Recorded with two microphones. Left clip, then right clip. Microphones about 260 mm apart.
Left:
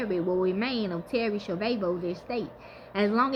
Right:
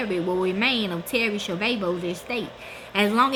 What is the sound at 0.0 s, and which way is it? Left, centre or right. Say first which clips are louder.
A woman's voice: right 2 dB; centre.